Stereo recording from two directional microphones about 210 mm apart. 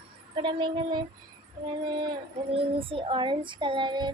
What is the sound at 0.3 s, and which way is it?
Speech, 25° right (ahead or behind).